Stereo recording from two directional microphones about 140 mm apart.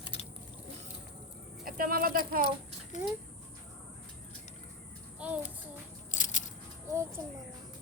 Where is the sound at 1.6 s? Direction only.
90° right.